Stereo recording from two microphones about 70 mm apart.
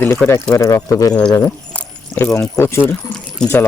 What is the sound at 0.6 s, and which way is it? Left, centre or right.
Speech, left.